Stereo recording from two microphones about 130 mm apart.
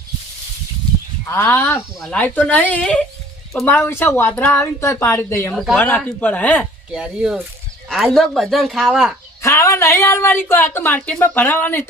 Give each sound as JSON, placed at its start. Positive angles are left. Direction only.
{"t": 1.3, "sound": "a woman's voice", "side_deg": 15}
{"t": 6.9, "sound": "speech", "side_deg": -5}
{"t": 9.4, "sound": "a woman's voice", "side_deg": 25}